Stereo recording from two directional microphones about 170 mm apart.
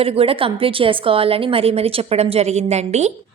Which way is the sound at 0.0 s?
35° right (ahead or behind).